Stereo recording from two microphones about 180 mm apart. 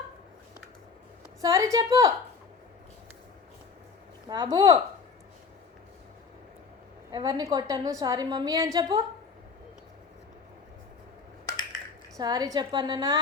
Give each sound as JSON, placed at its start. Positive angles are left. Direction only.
{"t": 1.4, "sound": "a woman's voice", "side_deg": -15}
{"t": 4.3, "sound": "a woman's voice", "side_deg": -20}
{"t": 7.1, "sound": "a woman's voice", "side_deg": -25}
{"t": 12.1, "sound": "a woman's voice", "side_deg": -20}